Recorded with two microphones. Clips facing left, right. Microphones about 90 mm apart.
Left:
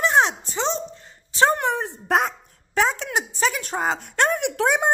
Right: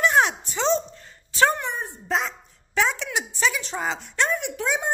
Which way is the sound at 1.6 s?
90° left.